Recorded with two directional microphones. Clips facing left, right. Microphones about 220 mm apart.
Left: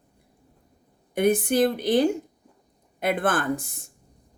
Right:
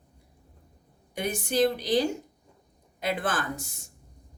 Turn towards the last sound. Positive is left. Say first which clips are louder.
# left 7 dB
turn(degrees=55)  # may be behind; listen again after turning